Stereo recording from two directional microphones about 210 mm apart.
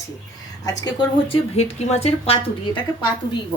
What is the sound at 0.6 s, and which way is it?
A woman's voice, 20° left (ahead or behind).